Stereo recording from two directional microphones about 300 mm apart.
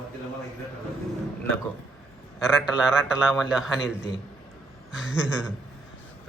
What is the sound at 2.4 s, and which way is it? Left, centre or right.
A man's voice, centre.